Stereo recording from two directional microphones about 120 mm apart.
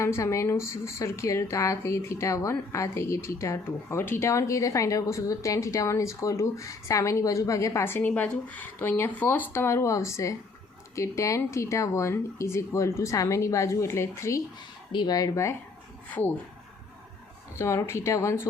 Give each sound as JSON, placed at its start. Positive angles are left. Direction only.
{"t": 0.0, "sound": "a woman's voice", "side_deg": 25}
{"t": 17.6, "sound": "a woman's voice", "side_deg": 25}